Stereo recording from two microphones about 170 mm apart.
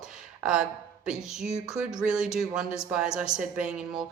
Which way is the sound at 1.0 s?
5° right (ahead or behind).